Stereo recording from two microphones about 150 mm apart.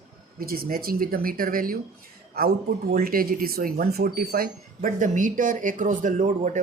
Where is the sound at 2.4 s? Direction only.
90° right.